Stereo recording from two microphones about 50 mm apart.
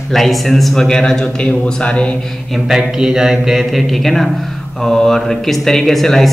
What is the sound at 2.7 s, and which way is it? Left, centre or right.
Mantra, centre.